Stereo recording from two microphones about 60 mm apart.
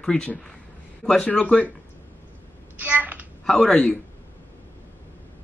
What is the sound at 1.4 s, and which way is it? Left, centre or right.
Speech, left.